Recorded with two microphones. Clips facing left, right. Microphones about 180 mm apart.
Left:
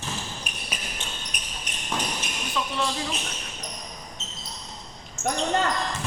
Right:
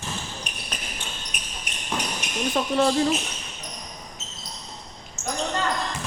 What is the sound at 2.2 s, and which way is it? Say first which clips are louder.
Basketball bounce: right 2 dB; 15° right (ahead or behind).